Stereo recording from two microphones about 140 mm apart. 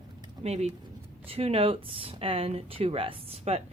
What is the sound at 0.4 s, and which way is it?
Speech, 50° right (ahead or behind).